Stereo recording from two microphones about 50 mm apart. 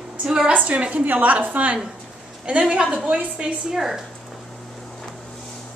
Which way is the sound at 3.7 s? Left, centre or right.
Centre.